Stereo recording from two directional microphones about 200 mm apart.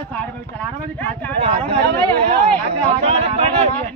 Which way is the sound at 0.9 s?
10° left (ahead or behind).